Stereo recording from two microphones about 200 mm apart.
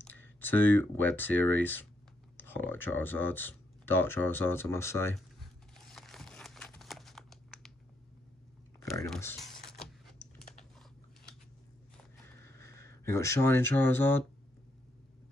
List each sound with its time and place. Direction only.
0.0 s speech: 10° left (ahead or behind)
5.8 s crumpling: centre (ahead or behind)
8.8 s typing: 15° left (ahead or behind)
9.1 s speech: 10° left (ahead or behind)
9.4 s a sound: centre (ahead or behind)
12.5 s speech: 15° left (ahead or behind)